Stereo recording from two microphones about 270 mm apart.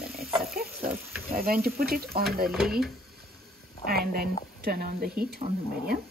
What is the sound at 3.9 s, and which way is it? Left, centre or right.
Speech, right.